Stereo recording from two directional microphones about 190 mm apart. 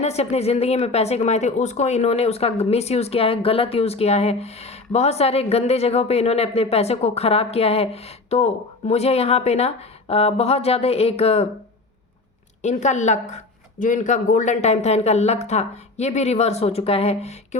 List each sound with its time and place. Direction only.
0.0 s speech: 35° left (ahead or behind)
12.6 s speech: 40° left (ahead or behind)